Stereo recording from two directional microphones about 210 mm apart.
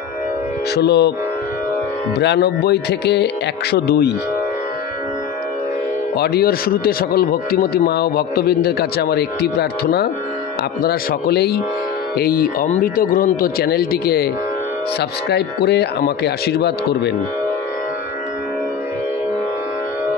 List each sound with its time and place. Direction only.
0.7 s speech: 50° left (ahead or behind)
2.1 s speech: 50° left (ahead or behind)
6.1 s speech: 50° left (ahead or behind)